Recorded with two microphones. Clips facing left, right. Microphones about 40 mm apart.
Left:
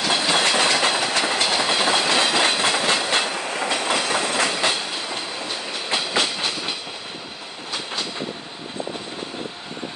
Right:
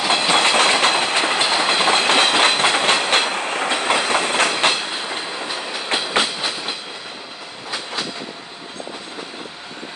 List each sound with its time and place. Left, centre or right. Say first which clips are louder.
0.1 s train: right 4 dB; right